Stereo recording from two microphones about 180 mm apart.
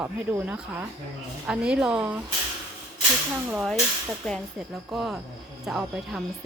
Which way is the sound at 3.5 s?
Centre (ahead or behind).